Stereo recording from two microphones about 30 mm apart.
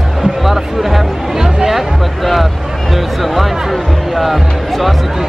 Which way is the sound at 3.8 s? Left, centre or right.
Centre.